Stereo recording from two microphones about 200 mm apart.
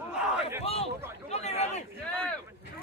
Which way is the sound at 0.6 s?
30° left (ahead or behind).